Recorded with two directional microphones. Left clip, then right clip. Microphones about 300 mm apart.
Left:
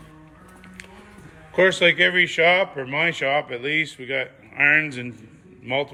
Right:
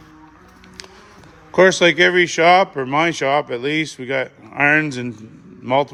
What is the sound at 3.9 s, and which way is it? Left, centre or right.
Speech, right.